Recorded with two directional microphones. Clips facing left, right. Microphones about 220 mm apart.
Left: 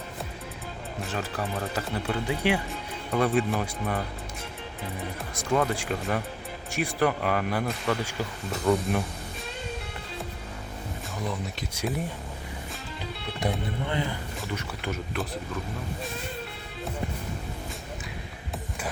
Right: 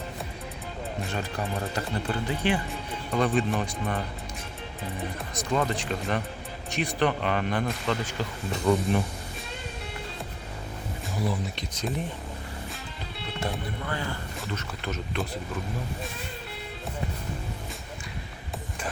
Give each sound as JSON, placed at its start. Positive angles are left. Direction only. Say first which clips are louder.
{"t": 1.7, "sound": "speech", "louder": "even", "side_deg": 10}
{"t": 5.3, "sound": "speech", "louder": "left 2 dB", "side_deg": 10}
{"t": 11.7, "sound": "speech", "louder": "left 2 dB", "side_deg": 10}
{"t": 13.4, "sound": "speech", "louder": "left 3 dB", "side_deg": 20}